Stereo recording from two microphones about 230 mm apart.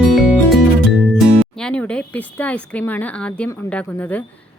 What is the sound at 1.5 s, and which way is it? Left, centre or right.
A woman's voice, centre.